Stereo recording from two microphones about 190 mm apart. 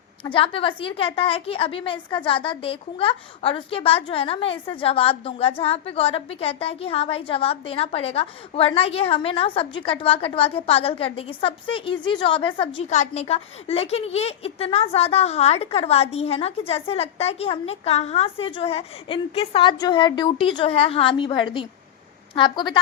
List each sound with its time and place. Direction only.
0.3 s a woman's voice: 30° left (ahead or behind)